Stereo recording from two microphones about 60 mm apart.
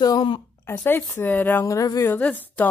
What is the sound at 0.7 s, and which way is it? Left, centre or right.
Speech, left.